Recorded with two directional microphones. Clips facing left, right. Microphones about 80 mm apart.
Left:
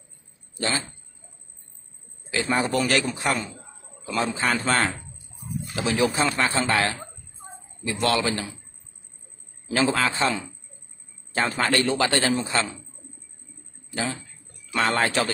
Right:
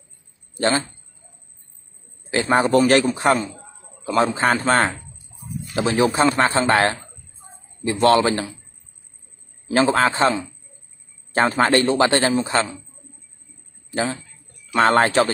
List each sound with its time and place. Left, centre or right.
0.6 s speech: right
2.3 s a man's voice: right
9.7 s a man's voice: right
13.9 s a man's voice: right